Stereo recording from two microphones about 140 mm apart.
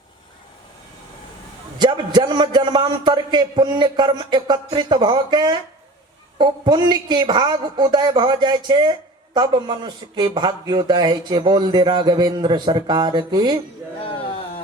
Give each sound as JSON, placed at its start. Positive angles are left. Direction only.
{"t": 1.8, "sound": "a woman's voice", "side_deg": -30}